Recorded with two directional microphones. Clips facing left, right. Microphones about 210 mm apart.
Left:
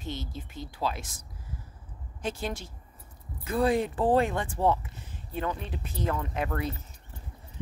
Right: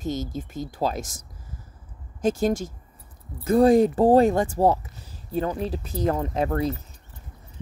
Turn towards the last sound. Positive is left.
turn(degrees=-35)  # may be behind; listen again after turning